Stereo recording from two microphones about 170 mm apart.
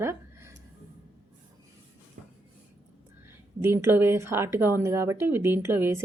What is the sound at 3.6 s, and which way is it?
A woman's voice, 15° right (ahead or behind).